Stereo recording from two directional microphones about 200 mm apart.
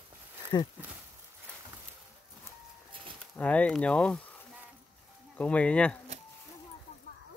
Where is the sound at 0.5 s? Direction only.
20° left (ahead or behind).